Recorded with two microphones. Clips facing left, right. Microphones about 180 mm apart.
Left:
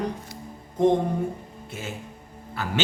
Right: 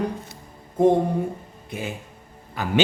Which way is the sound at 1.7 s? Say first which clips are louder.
Right 4 dB; 15° right (ahead or behind).